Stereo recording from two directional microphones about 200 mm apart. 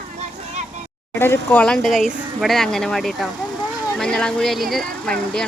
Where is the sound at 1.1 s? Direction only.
10° left (ahead or behind).